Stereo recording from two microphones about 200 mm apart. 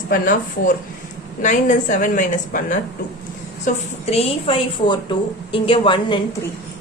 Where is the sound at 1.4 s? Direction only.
40° left (ahead or behind).